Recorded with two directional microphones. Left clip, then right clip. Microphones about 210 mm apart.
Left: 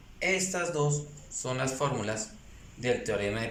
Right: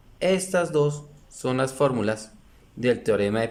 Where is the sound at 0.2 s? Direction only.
55° right (ahead or behind).